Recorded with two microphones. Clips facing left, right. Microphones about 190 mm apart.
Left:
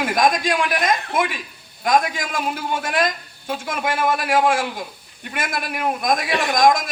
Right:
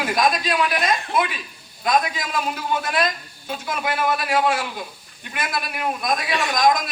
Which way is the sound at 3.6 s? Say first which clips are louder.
Left 1 dB; 50° left (ahead or behind).